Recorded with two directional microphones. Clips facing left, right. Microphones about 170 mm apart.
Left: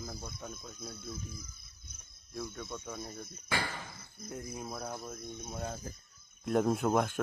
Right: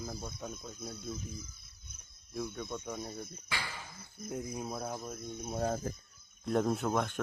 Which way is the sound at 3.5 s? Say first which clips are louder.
Left 7 dB; 50° left (ahead or behind).